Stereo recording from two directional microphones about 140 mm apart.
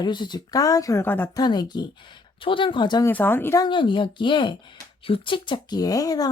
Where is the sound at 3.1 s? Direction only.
15° left (ahead or behind).